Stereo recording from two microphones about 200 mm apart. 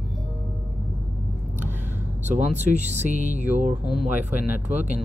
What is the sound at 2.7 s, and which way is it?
Speech, 35° right (ahead or behind).